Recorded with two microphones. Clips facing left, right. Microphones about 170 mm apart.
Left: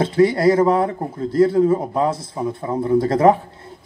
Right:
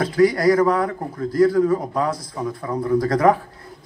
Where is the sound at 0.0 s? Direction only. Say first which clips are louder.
Left 1 dB; 25° left (ahead or behind).